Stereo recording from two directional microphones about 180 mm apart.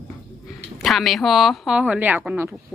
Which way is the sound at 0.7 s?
Centre (ahead or behind).